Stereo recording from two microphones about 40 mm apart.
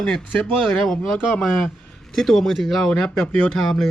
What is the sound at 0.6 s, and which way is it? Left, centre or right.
A man's voice, centre.